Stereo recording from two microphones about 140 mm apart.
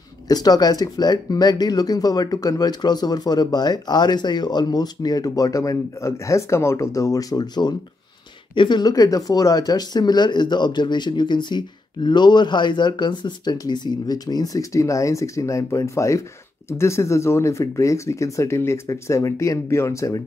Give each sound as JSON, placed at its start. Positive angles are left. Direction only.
{"t": 0.3, "sound": "speech", "side_deg": 30}